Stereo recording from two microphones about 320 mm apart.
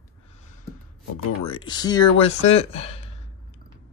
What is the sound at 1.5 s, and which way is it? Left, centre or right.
Speech, centre.